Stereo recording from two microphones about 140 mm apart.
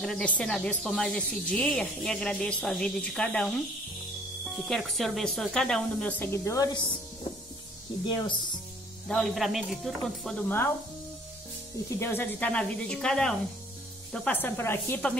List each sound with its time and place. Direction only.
0.0 s speech: 5° left (ahead or behind)
4.6 s speech: centre (ahead or behind); by 6.8 s 25° left (ahead or behind)
8.0 s speech: 35° left (ahead or behind)
9.1 s speech: centre (ahead or behind)
11.9 s speech: 15° left (ahead or behind)